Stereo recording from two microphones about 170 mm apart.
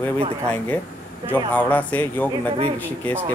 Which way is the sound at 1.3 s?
10° left (ahead or behind).